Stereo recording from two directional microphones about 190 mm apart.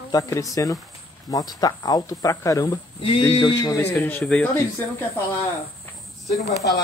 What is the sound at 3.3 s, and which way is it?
Speech, 20° left (ahead or behind).